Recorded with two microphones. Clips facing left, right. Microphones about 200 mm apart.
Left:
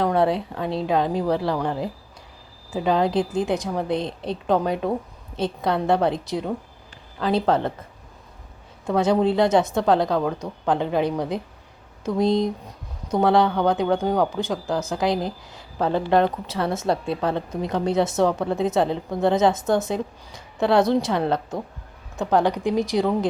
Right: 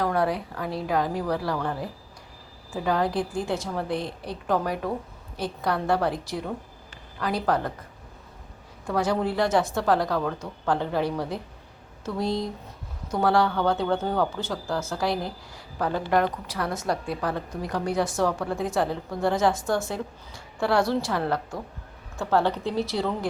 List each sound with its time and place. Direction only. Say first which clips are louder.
0.0 s speech: left 4 dB; 25° left (ahead or behind)
8.9 s a woman's voice: left 6 dB; 20° left (ahead or behind)